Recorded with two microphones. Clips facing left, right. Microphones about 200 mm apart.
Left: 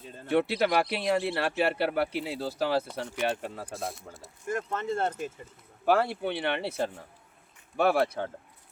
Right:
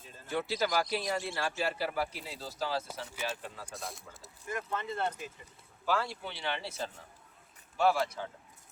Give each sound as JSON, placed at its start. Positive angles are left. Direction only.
{"t": 0.3, "sound": "speech", "side_deg": 65}
{"t": 3.8, "sound": "speech", "side_deg": 0}
{"t": 4.4, "sound": "speech", "side_deg": 50}
{"t": 5.8, "sound": "speech", "side_deg": 60}